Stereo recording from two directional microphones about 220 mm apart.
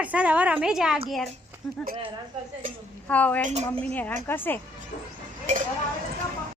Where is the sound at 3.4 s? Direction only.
30° right (ahead or behind).